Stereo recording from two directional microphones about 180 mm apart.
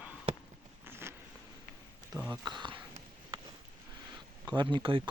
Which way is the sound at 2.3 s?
25° right (ahead or behind).